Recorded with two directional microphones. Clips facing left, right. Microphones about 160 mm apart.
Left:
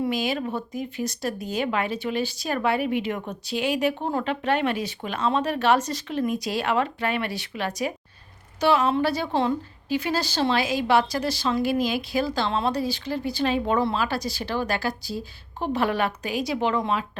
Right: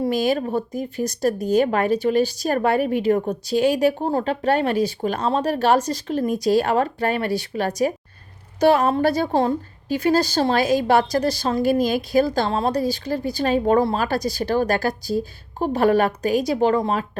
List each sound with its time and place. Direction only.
0.0 s a woman's voice: 40° right (ahead or behind)